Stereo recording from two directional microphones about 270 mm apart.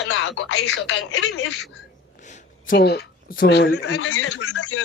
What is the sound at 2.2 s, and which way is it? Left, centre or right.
Speech, left.